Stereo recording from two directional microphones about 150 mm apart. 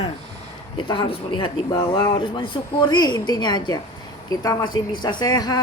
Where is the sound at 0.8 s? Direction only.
30° left (ahead or behind).